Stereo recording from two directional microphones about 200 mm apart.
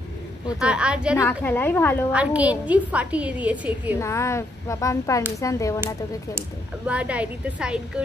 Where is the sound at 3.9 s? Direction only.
15° left (ahead or behind).